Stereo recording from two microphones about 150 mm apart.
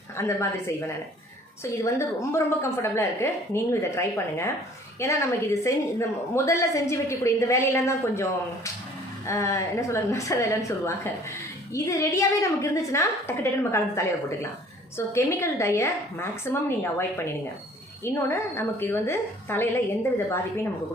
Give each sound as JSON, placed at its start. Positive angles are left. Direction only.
{"t": 0.2, "sound": "a woman's voice", "side_deg": 15}
{"t": 1.6, "sound": "a woman's voice", "side_deg": 20}
{"t": 18.0, "sound": "a woman's voice", "side_deg": 15}